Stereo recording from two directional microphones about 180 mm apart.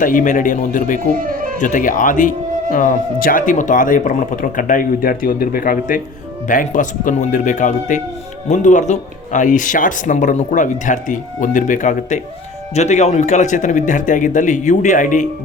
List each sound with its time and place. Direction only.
0.0 s speech: 45° left (ahead or behind)
1.1 s music: 50° right (ahead or behind)
1.5 s speech: 45° left (ahead or behind)